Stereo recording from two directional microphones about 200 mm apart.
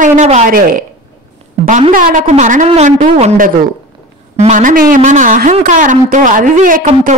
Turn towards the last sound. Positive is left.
turn(degrees=-40)  # may be behind; listen again after turning